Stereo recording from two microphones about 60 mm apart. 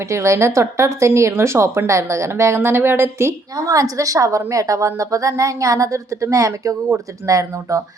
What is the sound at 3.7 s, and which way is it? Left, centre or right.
A woman's voice, right.